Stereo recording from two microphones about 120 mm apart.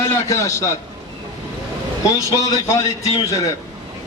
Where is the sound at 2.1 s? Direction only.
30° left (ahead or behind).